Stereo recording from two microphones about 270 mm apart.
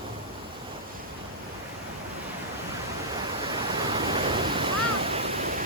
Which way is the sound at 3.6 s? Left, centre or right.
Centre.